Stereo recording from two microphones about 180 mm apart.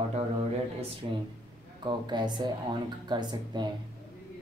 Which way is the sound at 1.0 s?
30° right (ahead or behind).